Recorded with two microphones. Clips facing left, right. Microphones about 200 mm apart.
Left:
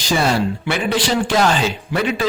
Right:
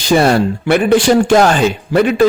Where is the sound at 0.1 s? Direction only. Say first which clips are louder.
Right 7 dB; 55° right (ahead or behind).